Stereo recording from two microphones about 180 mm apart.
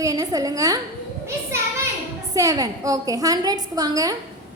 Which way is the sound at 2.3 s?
20° right (ahead or behind).